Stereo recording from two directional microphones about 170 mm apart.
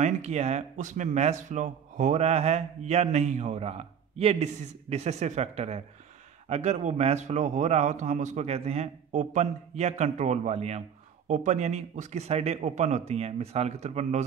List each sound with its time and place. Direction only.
0.0 s speech: 40° right (ahead or behind)